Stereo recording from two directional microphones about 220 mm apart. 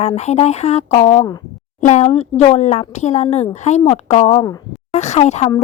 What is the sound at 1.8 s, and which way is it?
A woman's voice, 35° left (ahead or behind).